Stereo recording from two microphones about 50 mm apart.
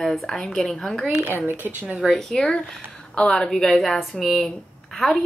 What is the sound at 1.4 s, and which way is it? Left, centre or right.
Speech, right.